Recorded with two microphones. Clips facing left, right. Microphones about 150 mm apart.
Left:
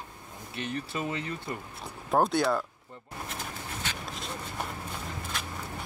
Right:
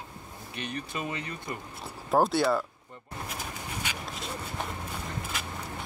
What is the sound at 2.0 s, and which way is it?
Speech, centre (ahead or behind).